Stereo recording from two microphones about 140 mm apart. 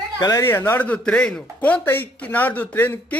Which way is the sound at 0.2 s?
25° left (ahead or behind).